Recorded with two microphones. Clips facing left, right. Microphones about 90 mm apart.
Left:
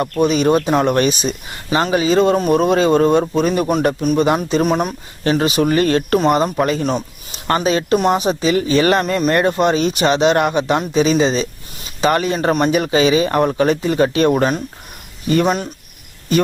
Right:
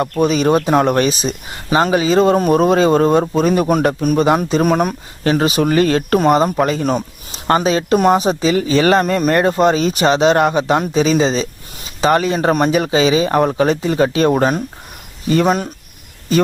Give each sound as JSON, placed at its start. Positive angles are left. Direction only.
{"t": 0.2, "sound": "a man's voice", "side_deg": -40}
{"t": 5.3, "sound": "speech", "side_deg": -35}